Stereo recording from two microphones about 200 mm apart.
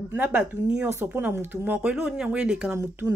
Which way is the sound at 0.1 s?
10° right (ahead or behind).